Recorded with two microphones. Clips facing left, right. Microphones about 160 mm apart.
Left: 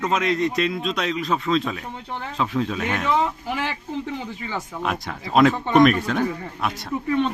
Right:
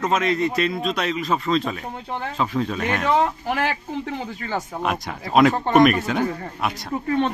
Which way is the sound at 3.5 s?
55° right (ahead or behind).